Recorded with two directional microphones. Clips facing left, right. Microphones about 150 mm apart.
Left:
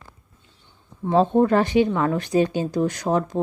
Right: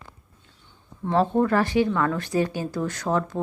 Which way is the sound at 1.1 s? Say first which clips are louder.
Left 3 dB; 20° left (ahead or behind).